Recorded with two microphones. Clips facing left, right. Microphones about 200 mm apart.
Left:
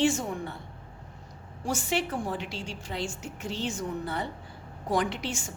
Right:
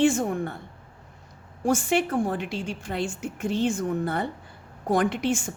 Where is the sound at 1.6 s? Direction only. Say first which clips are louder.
Right 7 dB; 50° right (ahead or behind).